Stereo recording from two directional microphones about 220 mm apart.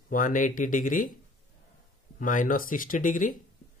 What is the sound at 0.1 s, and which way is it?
Speech, 40° left (ahead or behind).